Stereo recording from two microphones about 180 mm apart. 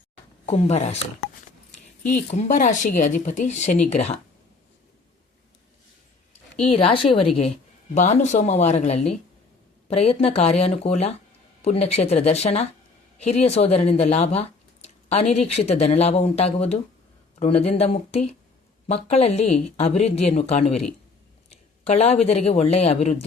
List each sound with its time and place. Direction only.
0.4 s speech: 35° left (ahead or behind)
2.0 s speech: 40° left (ahead or behind)
6.7 s speech: 30° left (ahead or behind)